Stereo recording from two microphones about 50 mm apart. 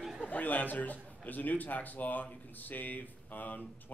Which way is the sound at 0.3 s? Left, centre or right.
Left.